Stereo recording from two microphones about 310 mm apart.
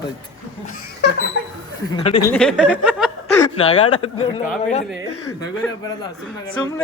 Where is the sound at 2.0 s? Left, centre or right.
Centre.